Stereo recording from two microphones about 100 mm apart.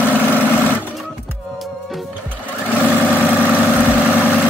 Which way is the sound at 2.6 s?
15° left (ahead or behind).